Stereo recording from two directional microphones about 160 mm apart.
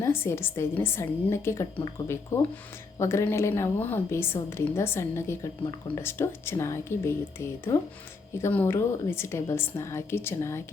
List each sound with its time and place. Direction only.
0.0 s a woman's voice: 15° left (ahead or behind)